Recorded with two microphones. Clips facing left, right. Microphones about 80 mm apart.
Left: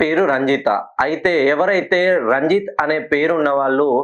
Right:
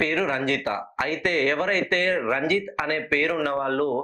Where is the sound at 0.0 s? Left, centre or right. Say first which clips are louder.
Left 9 dB; left.